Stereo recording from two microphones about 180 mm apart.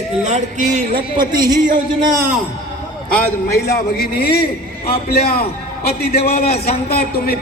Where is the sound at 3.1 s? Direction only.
15° left (ahead or behind).